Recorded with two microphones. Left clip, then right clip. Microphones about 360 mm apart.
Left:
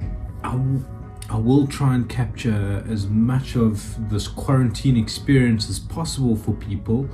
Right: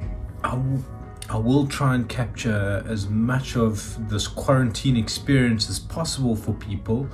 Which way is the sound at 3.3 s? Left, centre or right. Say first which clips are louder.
Left 1 dB; right.